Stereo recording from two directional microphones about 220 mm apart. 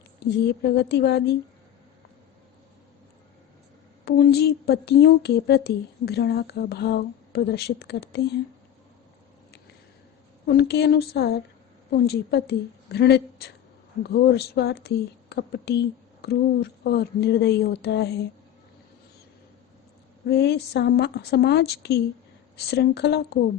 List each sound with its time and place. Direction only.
0.8 s speech: 50° left (ahead or behind)
4.0 s speech: 45° left (ahead or behind)
10.5 s speech: 50° left (ahead or behind)
20.2 s speech: 50° left (ahead or behind)